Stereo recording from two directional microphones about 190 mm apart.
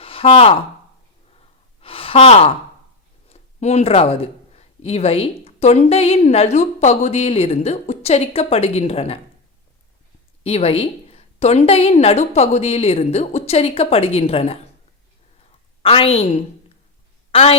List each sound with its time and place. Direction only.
0.0 s a sound: 30° left (ahead or behind)
1.8 s gasp: 30° left (ahead or behind)
3.2 s speech: 35° left (ahead or behind)
10.4 s speech: 30° left (ahead or behind)
15.8 s a woman's voice: 30° left (ahead or behind)